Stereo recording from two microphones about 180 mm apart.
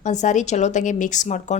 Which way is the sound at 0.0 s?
40° left (ahead or behind).